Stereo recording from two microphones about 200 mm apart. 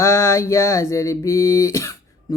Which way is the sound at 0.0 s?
15° left (ahead or behind).